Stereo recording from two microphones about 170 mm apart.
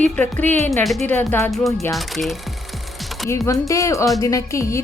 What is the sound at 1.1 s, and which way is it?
Speech, 10° left (ahead or behind).